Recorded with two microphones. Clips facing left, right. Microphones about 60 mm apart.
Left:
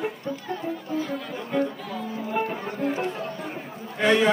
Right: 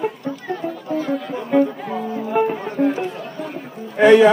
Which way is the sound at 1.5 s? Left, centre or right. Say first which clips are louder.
Right 9 dB; right.